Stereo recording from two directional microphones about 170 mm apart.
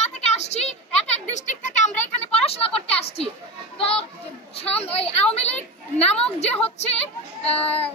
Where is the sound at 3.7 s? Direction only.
35° left (ahead or behind).